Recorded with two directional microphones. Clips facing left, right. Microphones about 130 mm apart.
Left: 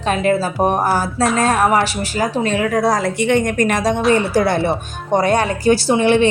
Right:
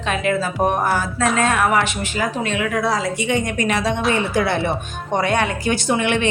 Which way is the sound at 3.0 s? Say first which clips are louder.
Left 5 dB; 55° left (ahead or behind).